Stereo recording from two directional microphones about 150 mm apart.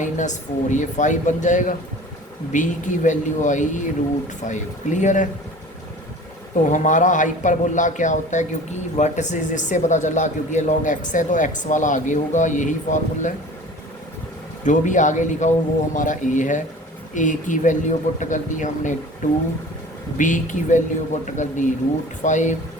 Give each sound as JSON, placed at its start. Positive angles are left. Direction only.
{"t": 0.0, "sound": "a man's voice", "side_deg": 55}
{"t": 6.7, "sound": "a man's voice", "side_deg": 55}
{"t": 14.6, "sound": "a man's voice", "side_deg": 55}